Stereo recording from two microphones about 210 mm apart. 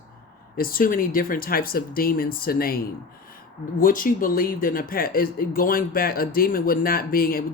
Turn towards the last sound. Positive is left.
turn(degrees=45)  # may be behind; listen again after turning